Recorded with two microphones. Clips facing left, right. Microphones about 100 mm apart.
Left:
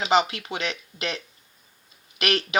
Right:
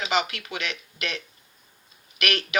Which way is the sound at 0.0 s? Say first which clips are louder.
Left 5 dB; 30° left (ahead or behind).